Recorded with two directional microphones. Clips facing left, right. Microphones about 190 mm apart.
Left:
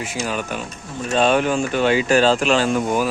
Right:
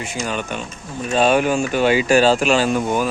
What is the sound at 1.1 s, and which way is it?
Speech, 10° right (ahead or behind).